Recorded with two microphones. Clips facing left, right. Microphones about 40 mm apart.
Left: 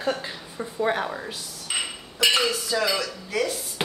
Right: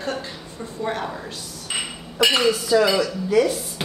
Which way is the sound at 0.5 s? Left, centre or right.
Centre.